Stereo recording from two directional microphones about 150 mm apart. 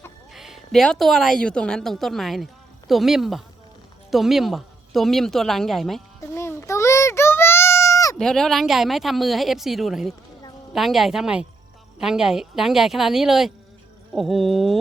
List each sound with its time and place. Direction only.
0.3 s a woman's voice: centre (ahead or behind)
6.1 s child singing: 20° left (ahead or behind)
8.2 s speech: 5° left (ahead or behind)